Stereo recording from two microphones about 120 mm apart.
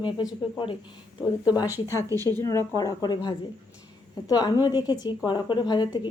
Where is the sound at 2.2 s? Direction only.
20° left (ahead or behind); by 6.1 s 40° left (ahead or behind).